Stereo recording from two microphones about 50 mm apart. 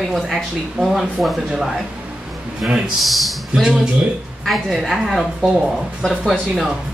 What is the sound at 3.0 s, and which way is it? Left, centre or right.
Speech, centre.